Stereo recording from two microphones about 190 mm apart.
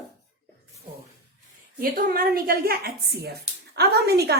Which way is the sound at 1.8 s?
50° right (ahead or behind).